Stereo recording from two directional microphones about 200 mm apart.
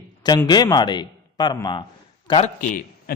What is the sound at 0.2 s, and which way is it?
A man's voice, 20° left (ahead or behind).